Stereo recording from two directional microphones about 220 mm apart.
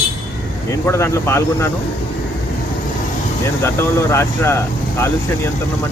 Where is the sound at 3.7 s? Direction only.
10° left (ahead or behind).